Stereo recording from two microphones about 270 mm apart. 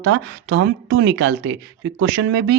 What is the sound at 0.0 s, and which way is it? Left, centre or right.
Speech, right.